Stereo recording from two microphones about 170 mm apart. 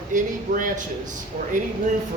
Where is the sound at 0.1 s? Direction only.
50° right (ahead or behind).